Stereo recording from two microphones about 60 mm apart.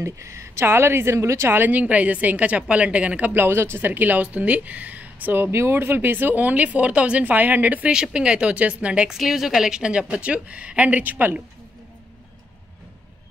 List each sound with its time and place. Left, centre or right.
0.0 s a woman's voice: right
1.5 s speech: right
3.3 s speech: right
5.4 s speech: right
7.9 s a woman's voice: centre
9.1 s speech: centre; by 11.4 s right